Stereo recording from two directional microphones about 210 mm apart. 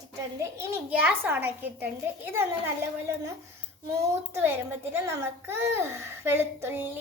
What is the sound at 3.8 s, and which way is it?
A child's voice, 10° right (ahead or behind).